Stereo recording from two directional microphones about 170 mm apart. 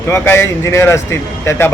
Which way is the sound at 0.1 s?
15° left (ahead or behind).